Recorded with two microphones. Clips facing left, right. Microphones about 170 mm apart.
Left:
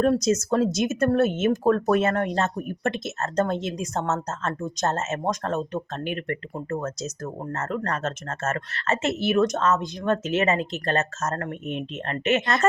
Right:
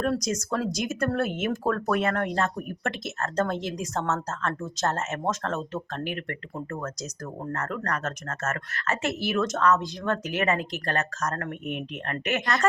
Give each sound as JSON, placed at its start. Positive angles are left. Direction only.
{"t": 0.0, "sound": "speech", "side_deg": 25}